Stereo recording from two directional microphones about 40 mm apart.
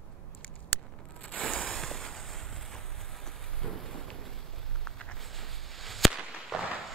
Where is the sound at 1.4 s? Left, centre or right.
Left.